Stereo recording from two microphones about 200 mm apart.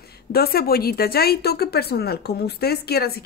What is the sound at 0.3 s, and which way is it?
A woman's voice, 50° left (ahead or behind).